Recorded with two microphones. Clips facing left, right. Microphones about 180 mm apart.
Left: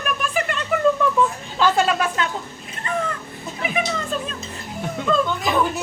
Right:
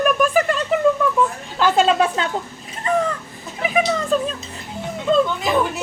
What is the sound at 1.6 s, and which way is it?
Speech, 20° right (ahead or behind).